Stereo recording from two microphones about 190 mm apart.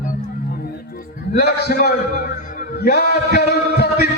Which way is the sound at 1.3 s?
55° left (ahead or behind).